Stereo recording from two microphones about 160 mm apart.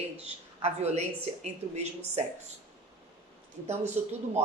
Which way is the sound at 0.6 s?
40° right (ahead or behind).